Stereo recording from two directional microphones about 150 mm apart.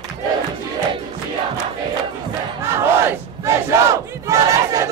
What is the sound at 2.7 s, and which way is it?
Crowd, 20° right (ahead or behind).